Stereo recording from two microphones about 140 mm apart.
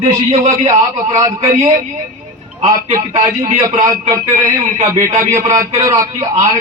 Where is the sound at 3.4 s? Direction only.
25° right (ahead or behind).